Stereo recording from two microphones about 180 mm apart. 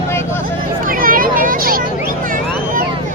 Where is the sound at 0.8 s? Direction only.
50° right (ahead or behind).